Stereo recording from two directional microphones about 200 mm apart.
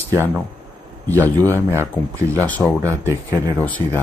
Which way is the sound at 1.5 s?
15° right (ahead or behind).